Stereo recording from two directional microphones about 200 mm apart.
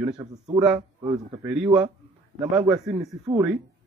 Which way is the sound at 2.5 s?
20° right (ahead or behind).